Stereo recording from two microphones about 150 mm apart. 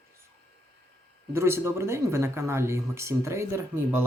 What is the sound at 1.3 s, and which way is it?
Speech, 15° right (ahead or behind).